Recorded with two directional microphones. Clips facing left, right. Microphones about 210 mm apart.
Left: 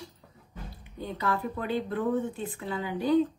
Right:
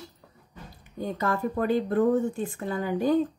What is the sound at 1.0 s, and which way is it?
A woman's voice, 45° right (ahead or behind).